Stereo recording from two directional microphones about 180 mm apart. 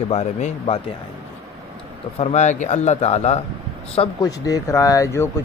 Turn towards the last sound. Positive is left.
turn(degrees=15)  # may be behind; listen again after turning